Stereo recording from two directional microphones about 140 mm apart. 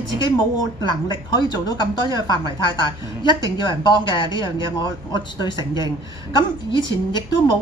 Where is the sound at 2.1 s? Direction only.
30° left (ahead or behind).